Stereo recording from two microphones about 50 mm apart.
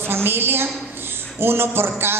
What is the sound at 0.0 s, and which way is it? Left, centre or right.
A woman's voice, right.